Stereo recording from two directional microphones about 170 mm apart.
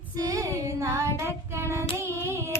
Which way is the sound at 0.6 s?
15° right (ahead or behind).